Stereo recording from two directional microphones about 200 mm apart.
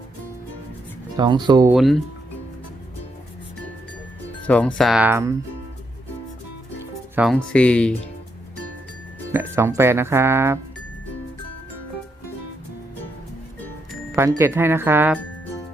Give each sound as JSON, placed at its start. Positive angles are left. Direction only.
{"t": 1.1, "sound": "speech", "side_deg": -20}
{"t": 1.7, "sound": "speech", "side_deg": 0}
{"t": 4.4, "sound": "speech", "side_deg": 5}
{"t": 7.2, "sound": "speech", "side_deg": -10}
{"t": 7.5, "sound": "speech", "side_deg": 5}
{"t": 9.3, "sound": "speech", "side_deg": -10}
{"t": 14.2, "sound": "speech", "side_deg": -15}